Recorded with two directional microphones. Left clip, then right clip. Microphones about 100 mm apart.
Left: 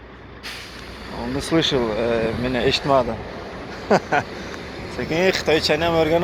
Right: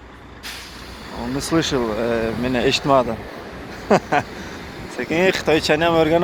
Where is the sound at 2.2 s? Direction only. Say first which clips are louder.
Right 1 dB; 85° right.